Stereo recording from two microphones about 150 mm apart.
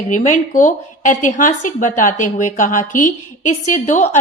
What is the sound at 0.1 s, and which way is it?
A woman's voice, 60° left (ahead or behind).